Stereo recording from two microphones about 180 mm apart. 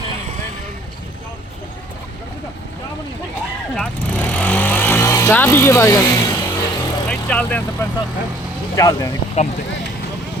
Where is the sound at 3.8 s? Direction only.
5° left (ahead or behind).